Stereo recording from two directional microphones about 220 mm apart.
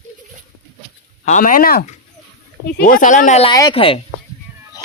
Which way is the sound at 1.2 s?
35° left (ahead or behind).